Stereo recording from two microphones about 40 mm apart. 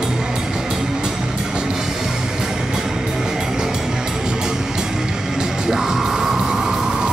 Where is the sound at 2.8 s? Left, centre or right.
Centre.